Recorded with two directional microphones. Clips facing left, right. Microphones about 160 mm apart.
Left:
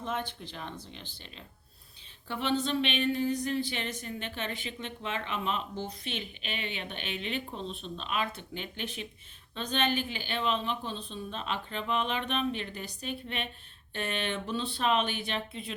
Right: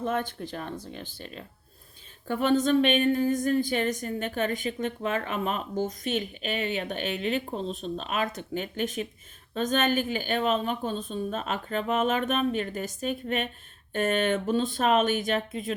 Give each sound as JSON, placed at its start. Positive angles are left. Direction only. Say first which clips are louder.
{"t": 0.0, "sound": "a woman's voice", "louder": "right 6 dB", "side_deg": -50}